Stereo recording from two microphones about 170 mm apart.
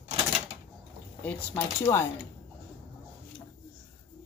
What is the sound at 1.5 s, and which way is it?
Speech, 15° left (ahead or behind).